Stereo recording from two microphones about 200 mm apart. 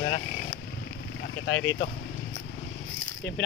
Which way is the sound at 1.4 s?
70° left (ahead or behind).